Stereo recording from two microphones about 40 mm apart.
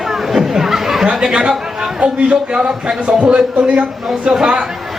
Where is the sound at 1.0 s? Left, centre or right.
Right.